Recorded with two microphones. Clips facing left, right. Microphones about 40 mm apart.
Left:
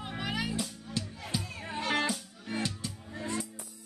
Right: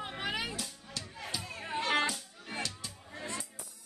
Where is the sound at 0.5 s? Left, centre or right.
Centre.